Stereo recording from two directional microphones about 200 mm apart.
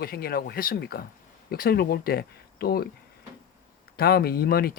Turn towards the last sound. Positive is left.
turn(degrees=50)  # may be behind; listen again after turning